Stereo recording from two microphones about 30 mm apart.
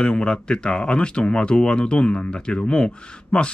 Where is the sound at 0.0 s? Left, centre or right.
Left.